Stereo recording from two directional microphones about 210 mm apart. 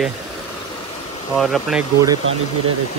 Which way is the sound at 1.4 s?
Centre (ahead or behind).